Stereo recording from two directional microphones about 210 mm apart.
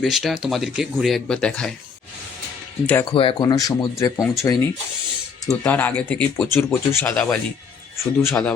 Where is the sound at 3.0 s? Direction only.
20° left (ahead or behind).